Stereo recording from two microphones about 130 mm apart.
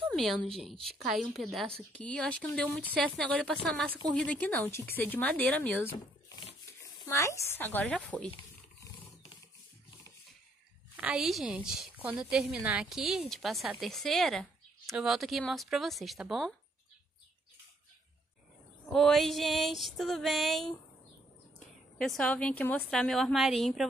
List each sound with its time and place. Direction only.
0.1 s a woman's voice: centre (ahead or behind)
11.0 s a woman's voice: 5° right (ahead or behind)
18.9 s a woman's voice: 5° left (ahead or behind)
21.9 s a woman's voice: 5° left (ahead or behind)